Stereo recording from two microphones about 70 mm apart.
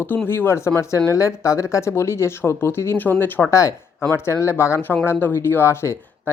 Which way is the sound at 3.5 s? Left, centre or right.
Left.